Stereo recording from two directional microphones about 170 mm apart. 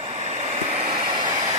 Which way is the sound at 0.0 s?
40° right (ahead or behind).